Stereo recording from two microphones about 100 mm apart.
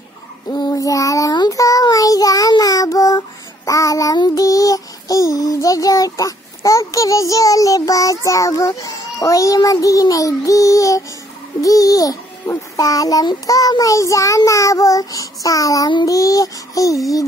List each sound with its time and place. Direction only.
0.5 s child singing: 40° left (ahead or behind)
11.6 s a child's voice: 35° left (ahead or behind)
16.1 s a sound: 35° left (ahead or behind)